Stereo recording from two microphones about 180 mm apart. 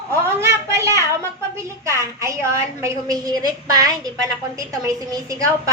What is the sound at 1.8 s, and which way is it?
A woman's voice, 15° right (ahead or behind).